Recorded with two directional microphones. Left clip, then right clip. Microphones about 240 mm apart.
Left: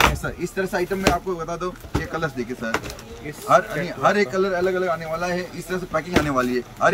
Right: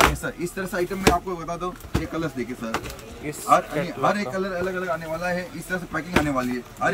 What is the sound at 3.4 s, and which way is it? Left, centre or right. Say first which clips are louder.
Speech: left 2 dB; centre.